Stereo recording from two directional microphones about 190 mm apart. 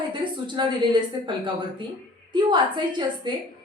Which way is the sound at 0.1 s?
25° right (ahead or behind).